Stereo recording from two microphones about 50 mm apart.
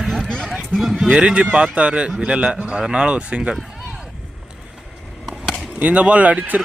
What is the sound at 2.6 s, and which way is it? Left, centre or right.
Speech, centre.